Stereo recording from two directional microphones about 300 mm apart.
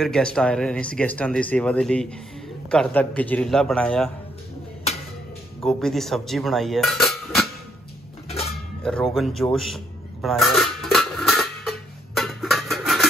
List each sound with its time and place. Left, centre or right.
0.0 s speech: centre
5.6 s speech: centre
8.3 s a sound: centre
8.8 s speech: centre
10.2 s a sound: centre
12.2 s music: centre